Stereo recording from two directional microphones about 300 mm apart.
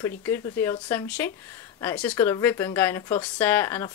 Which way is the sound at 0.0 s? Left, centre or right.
Centre.